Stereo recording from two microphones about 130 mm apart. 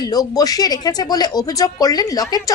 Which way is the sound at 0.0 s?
30° left (ahead or behind).